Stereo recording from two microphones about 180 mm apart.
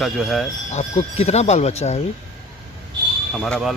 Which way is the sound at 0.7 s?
35° left (ahead or behind).